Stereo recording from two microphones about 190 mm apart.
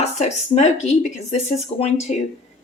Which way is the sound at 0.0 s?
35° left (ahead or behind).